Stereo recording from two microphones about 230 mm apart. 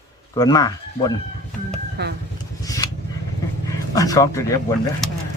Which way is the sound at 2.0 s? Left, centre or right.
Right.